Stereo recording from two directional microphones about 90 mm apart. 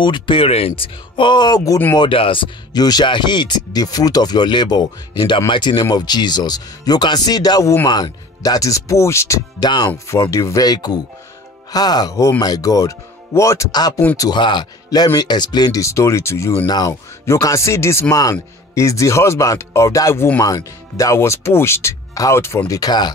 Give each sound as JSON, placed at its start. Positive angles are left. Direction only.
{"t": 0.0, "sound": "speech", "side_deg": 70}
{"t": 2.0, "sound": "speech", "side_deg": 75}
{"t": 2.7, "sound": "speech", "side_deg": 50}
{"t": 9.6, "sound": "speech", "side_deg": 50}
{"t": 9.8, "sound": "speech", "side_deg": 30}
{"t": 10.6, "sound": "speech", "side_deg": 50}
{"t": 13.7, "sound": "speech", "side_deg": 50}
{"t": 15.8, "sound": "speech", "side_deg": 35}
{"t": 16.6, "sound": "speech", "side_deg": 50}
{"t": 17.3, "sound": "speech", "side_deg": 35}
{"t": 22.7, "sound": "speech", "side_deg": 45}